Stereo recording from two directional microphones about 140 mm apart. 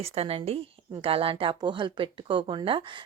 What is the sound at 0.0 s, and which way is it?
A woman's voice, 45° right (ahead or behind).